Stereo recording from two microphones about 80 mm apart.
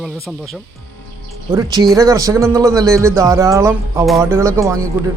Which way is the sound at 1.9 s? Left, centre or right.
Right.